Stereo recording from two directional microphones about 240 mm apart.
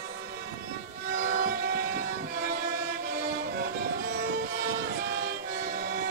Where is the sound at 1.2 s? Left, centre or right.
Right.